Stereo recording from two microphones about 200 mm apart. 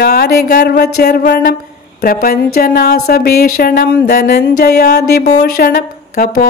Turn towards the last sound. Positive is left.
turn(degrees=45)  # may be behind; listen again after turning